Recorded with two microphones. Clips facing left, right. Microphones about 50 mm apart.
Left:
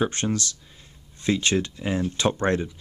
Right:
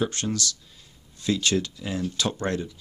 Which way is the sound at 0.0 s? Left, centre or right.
Left.